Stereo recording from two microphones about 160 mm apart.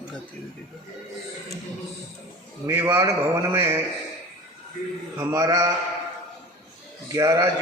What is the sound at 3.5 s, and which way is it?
Speech, 15° right (ahead or behind).